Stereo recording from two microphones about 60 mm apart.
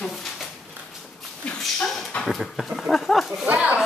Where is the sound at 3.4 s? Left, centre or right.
Right.